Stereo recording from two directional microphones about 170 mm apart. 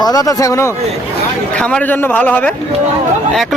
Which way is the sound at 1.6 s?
5° left (ahead or behind).